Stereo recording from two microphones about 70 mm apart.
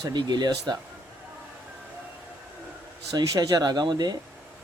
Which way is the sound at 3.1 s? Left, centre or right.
Right.